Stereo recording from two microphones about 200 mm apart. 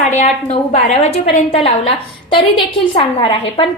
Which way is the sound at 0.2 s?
35° left (ahead or behind).